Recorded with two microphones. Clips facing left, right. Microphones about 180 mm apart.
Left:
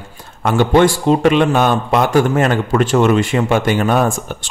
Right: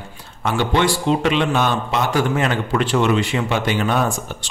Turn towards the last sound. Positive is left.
turn(degrees=50)  # may be behind; listen again after turning